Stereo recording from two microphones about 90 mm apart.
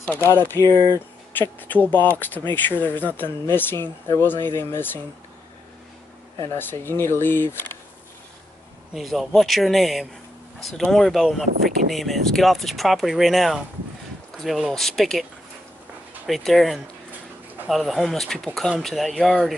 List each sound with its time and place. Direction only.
0.1 s speech: 25° left (ahead or behind)
6.5 s speech: 25° left (ahead or behind)
8.9 s speech: centre (ahead or behind)
16.3 s speech: centre (ahead or behind)